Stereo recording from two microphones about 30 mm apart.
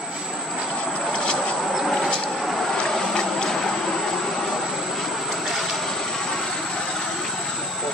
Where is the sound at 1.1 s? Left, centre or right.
Left.